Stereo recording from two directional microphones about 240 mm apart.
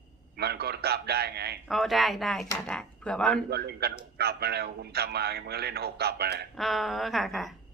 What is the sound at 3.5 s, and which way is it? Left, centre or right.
A man's voice, right.